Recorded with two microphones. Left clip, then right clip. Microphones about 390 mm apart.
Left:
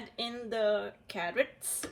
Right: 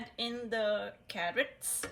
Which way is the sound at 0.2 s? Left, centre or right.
Centre.